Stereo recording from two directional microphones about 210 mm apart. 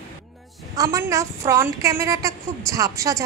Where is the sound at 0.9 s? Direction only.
15° right (ahead or behind).